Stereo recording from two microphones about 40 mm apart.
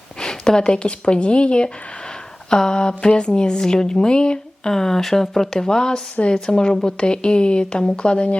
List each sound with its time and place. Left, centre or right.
0.2 s speech: centre
4.7 s speech: centre